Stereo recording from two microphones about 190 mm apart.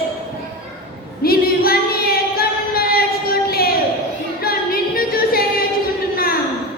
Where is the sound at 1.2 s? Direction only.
50° left (ahead or behind).